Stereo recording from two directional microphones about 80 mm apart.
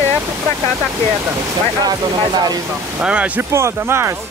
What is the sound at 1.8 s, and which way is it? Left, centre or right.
Speech, right.